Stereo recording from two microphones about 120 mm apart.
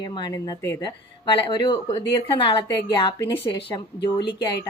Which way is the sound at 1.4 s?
40° left (ahead or behind).